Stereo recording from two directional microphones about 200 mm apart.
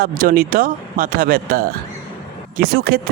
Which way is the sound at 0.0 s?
45° right (ahead or behind).